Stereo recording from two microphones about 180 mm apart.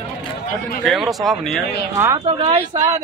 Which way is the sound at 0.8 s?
Centre (ahead or behind).